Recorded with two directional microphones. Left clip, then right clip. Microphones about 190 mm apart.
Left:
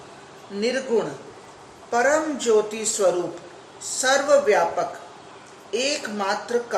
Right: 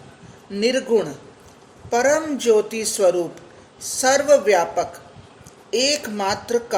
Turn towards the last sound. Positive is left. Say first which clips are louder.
# right 2 dB
turn(degrees=-50)  # may be behind; listen again after turning